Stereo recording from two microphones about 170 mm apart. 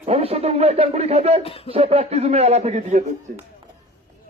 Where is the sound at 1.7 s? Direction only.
35° right (ahead or behind).